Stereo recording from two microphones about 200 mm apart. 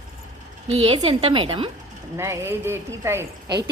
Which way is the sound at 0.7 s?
25° right (ahead or behind).